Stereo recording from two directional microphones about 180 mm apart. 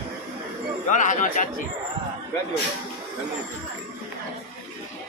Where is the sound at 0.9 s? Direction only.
45° left (ahead or behind).